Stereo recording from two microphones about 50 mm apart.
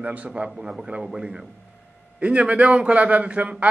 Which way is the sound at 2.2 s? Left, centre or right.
Right.